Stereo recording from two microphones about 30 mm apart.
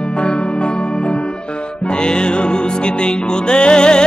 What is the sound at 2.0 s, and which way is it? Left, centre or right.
Music, left.